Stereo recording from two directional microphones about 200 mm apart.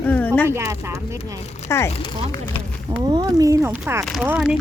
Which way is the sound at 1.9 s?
25° left (ahead or behind).